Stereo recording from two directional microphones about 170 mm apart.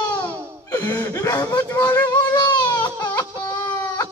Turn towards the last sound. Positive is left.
turn(degrees=25)  # may be behind; listen again after turning